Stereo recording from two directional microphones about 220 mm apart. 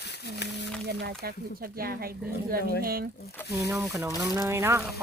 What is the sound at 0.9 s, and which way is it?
Speech, 45° right (ahead or behind).